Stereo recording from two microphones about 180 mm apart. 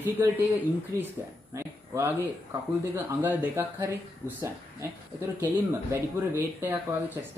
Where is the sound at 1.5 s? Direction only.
15° right (ahead or behind).